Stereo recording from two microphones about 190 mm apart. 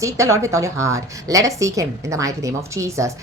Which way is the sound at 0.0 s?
15° right (ahead or behind).